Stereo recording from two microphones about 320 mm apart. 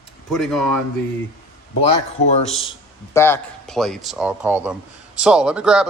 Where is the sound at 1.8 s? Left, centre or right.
Centre.